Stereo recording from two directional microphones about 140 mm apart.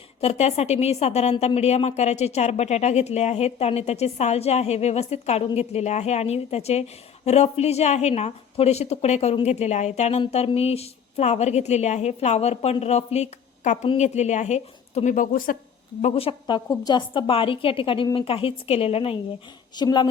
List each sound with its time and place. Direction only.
0.2 s a woman's voice: 50° left (ahead or behind); by 15.5 s 75° left (ahead or behind)
16.0 s a woman's voice: 50° left (ahead or behind)
16.6 s a woman's voice: 30° left (ahead or behind)
19.7 s a woman's voice: 30° left (ahead or behind)